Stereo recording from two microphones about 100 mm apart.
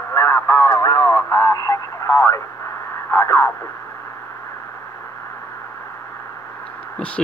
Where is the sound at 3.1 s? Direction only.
35° left (ahead or behind).